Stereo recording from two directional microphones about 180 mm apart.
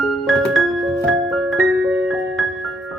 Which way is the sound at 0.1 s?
Centre (ahead or behind).